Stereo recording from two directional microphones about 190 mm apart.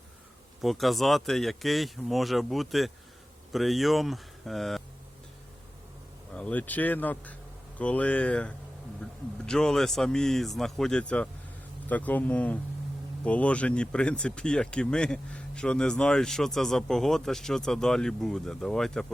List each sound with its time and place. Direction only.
0.6 s speech: centre (ahead or behind)
6.3 s speech: 5° left (ahead or behind)